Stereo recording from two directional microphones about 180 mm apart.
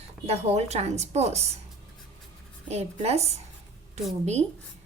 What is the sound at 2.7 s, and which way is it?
Speech, 35° right (ahead or behind).